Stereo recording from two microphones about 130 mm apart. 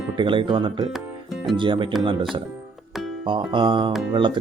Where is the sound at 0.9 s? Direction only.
Centre (ahead or behind).